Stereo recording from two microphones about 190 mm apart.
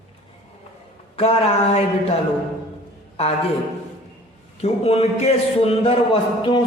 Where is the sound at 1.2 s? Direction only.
30° left (ahead or behind).